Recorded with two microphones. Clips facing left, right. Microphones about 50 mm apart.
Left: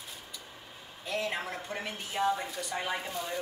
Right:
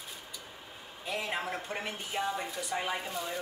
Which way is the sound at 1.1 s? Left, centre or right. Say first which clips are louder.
Left 1 dB; centre.